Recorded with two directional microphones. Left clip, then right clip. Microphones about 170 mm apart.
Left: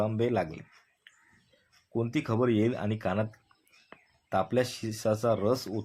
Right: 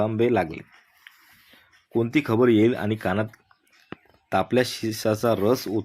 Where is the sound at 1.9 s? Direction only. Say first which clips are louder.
Right 8 dB; 30° right (ahead or behind).